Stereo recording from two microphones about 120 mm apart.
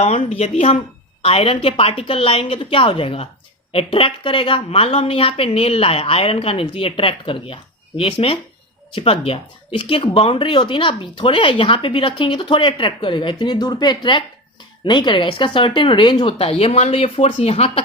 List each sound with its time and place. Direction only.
0.0 s speech: 60° left (ahead or behind)
1.2 s a woman's voice: 50° left (ahead or behind)
16.4 s a woman's voice: 55° left (ahead or behind)